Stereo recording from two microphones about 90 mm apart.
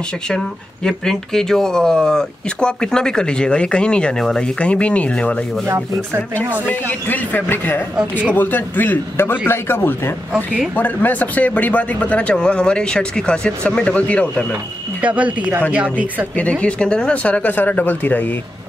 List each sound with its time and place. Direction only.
0.8 s speech: 5° left (ahead or behind); by 10.1 s 25° left (ahead or behind)
10.3 s speech: 10° right (ahead or behind)
10.7 s speech: 20° left (ahead or behind)
15.0 s speech: 15° right (ahead or behind)
16.3 s speech: 15° left (ahead or behind)